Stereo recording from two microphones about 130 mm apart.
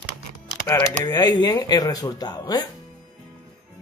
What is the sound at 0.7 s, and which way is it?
Speech, 25° left (ahead or behind).